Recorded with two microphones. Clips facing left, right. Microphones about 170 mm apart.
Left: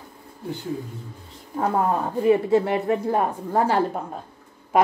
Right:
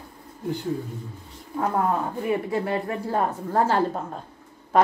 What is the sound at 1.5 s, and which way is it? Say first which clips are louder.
Speech: left 2 dB; 20° left (ahead or behind).